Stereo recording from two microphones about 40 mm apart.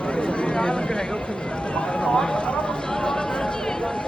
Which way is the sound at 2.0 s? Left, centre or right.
Left.